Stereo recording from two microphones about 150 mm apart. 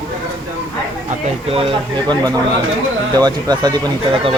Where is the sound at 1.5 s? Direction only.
40° right (ahead or behind).